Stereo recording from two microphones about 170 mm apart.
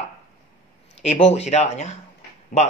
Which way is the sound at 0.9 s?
40° left (ahead or behind).